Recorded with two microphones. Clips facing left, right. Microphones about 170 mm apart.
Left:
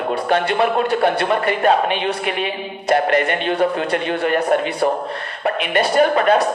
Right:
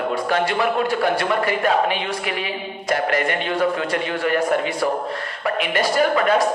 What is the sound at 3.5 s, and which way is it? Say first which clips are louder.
Speech: left 1 dB; 60° left (ahead or behind).